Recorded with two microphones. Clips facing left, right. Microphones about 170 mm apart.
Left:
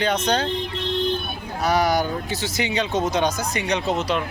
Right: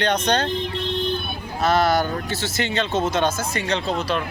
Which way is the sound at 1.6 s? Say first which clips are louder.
Right 1 dB; 10° left (ahead or behind).